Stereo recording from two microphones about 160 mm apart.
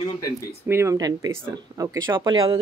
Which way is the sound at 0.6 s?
15° right (ahead or behind).